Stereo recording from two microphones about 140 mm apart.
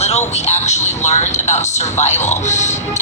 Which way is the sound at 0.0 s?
50° left (ahead or behind).